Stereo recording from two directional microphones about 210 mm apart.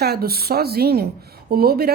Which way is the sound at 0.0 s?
50° right (ahead or behind).